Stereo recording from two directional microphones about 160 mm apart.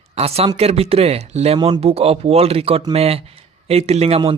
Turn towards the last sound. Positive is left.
turn(degrees=-40)  # may be behind; listen again after turning